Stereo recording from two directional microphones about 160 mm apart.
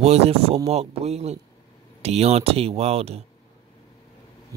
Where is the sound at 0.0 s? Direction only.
40° right (ahead or behind).